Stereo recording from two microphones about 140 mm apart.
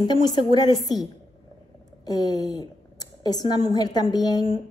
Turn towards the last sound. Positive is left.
turn(degrees=30)  # may be behind; listen again after turning